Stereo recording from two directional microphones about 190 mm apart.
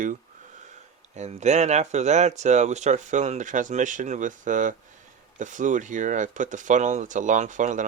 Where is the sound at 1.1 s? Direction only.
35° right (ahead or behind).